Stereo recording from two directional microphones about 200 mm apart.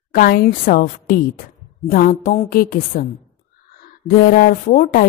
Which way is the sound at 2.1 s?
35° left (ahead or behind).